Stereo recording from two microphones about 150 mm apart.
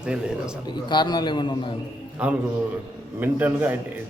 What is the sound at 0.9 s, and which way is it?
Speech, 30° left (ahead or behind).